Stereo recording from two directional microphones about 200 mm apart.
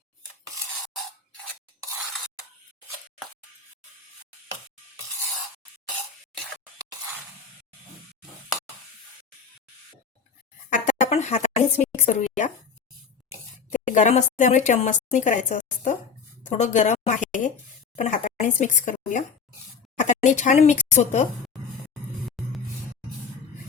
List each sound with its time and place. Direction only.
10.7 s a sound: 35° left (ahead or behind)
13.7 s a woman's voice: 35° left (ahead or behind)
22.3 s music: centre (ahead or behind)